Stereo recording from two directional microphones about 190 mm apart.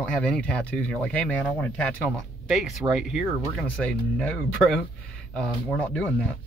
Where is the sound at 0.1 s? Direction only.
5° left (ahead or behind).